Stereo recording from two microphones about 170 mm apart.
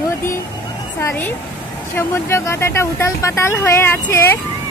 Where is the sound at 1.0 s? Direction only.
15° left (ahead or behind).